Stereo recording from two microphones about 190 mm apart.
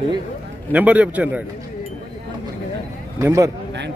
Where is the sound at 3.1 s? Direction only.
15° right (ahead or behind).